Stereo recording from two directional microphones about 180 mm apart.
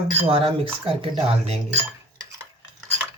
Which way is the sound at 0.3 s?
30° right (ahead or behind).